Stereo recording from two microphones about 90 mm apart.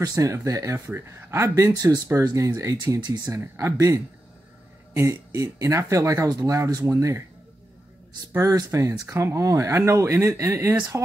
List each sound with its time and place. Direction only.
0.0 s speech: 40° right (ahead or behind)
8.4 s speech: 40° right (ahead or behind)